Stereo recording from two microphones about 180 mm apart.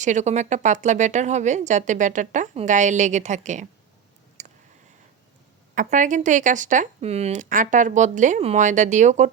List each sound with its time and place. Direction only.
0.0 s speech: 40° right (ahead or behind)
4.4 s a sound: 40° right (ahead or behind)
5.7 s speech: 45° right (ahead or behind)